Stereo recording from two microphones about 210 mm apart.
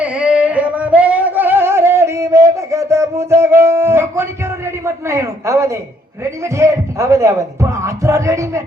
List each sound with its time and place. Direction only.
0.0 s singing: 5° right (ahead or behind)
6.4 s speech: 15° right (ahead or behind)